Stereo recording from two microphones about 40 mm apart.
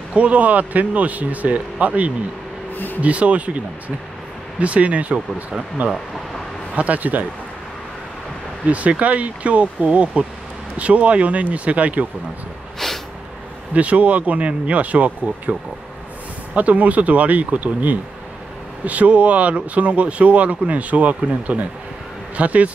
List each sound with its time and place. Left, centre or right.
0.1 s speech: right
2.7 s speech: left
3.0 s speech: right
8.6 s speech: right
12.7 s snort: centre
13.7 s speech: right
16.5 s speech: right